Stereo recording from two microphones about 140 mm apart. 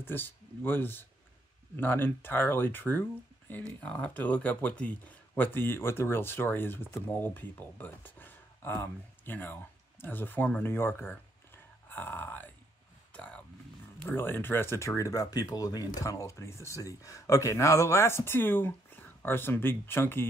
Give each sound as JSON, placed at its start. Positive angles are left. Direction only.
{"t": 0.0, "sound": "speech", "side_deg": 15}
{"t": 13.1, "sound": "a sound", "side_deg": 10}
{"t": 14.0, "sound": "speech", "side_deg": 15}